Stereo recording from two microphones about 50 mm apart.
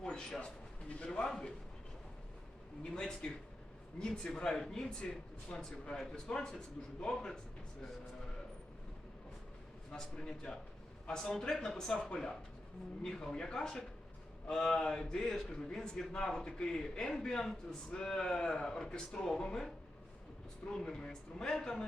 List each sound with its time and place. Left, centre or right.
0.0 s a man's voice: centre
2.9 s a man's voice: centre
9.9 s a man's voice: centre